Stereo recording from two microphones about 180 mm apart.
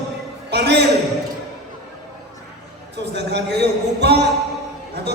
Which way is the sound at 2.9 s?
70° right (ahead or behind).